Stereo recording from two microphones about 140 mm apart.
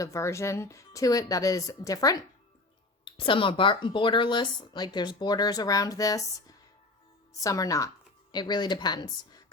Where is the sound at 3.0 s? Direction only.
35° left (ahead or behind).